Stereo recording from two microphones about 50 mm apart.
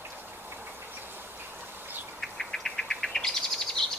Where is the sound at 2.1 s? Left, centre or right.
Centre.